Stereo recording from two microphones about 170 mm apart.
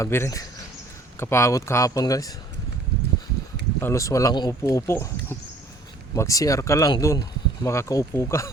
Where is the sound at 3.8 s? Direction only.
20° left (ahead or behind).